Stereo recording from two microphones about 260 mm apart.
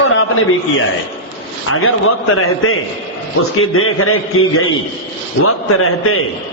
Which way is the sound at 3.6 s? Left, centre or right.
Left.